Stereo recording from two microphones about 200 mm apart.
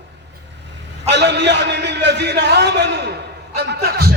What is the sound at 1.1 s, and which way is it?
A man's voice, 60° right (ahead or behind).